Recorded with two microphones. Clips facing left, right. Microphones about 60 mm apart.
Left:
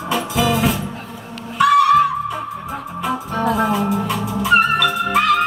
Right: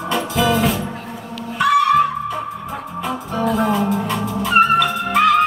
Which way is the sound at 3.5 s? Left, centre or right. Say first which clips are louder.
Right 1 dB; centre.